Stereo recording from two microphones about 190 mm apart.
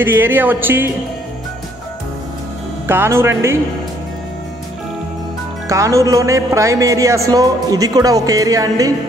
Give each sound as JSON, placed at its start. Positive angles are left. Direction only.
{"t": 0.0, "sound": "speech", "side_deg": -10}
{"t": 2.9, "sound": "speech", "side_deg": -10}
{"t": 5.7, "sound": "speech", "side_deg": -15}